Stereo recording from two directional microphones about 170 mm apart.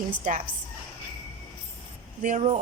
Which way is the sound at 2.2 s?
45° right (ahead or behind).